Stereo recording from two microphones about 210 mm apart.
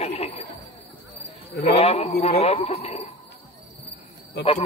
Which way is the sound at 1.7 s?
30° left (ahead or behind).